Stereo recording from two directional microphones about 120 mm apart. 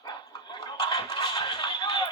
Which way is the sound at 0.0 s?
35° left (ahead or behind).